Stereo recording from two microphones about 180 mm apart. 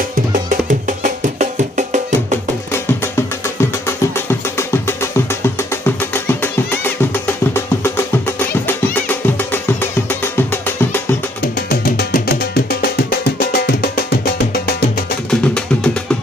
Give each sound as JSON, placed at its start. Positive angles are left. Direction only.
{"t": 0.8, "sound": "music", "side_deg": -45}
{"t": 2.7, "sound": "music", "side_deg": 15}
{"t": 11.7, "sound": "music", "side_deg": 60}
{"t": 15.2, "sound": "music", "side_deg": 5}